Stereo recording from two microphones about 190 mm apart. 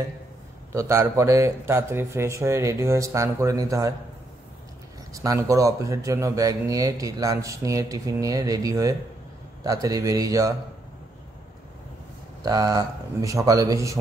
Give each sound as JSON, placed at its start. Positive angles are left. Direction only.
{"t": 0.7, "sound": "speech", "side_deg": -15}
{"t": 5.1, "sound": "speech", "side_deg": -15}
{"t": 12.4, "sound": "speech", "side_deg": -20}